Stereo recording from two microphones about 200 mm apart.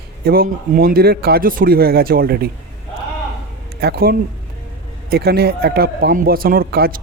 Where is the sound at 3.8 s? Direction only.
50° right (ahead or behind).